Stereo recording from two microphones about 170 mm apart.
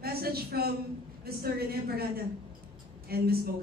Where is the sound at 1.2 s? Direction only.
65° right (ahead or behind).